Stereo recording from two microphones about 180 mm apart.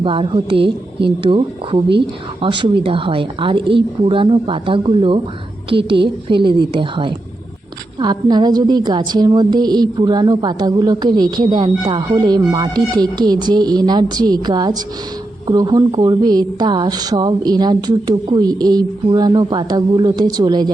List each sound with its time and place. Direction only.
0.0 s a woman's voice: 30° right (ahead or behind)